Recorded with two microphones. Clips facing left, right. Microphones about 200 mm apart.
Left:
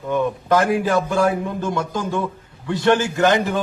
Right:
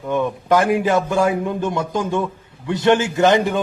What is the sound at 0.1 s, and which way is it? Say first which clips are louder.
A man's voice: right 1 dB; 15° right (ahead or behind).